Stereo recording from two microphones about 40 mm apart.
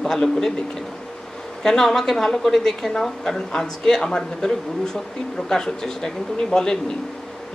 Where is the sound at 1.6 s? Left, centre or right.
Centre.